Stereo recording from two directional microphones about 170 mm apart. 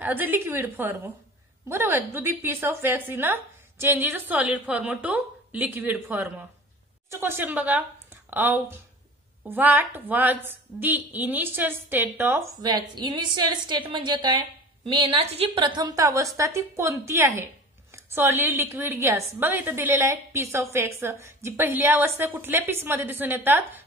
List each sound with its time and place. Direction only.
0.0 s a woman's voice: 10° right (ahead or behind)